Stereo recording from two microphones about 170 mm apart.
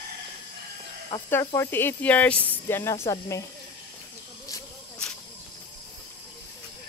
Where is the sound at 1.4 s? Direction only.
20° left (ahead or behind).